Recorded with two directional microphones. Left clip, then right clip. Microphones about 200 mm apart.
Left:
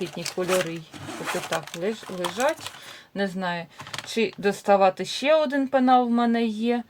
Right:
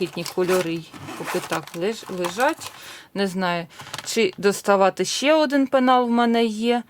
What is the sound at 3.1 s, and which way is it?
Speech, 40° right (ahead or behind).